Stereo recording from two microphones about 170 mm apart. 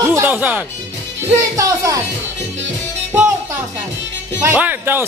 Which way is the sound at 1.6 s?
20° right (ahead or behind).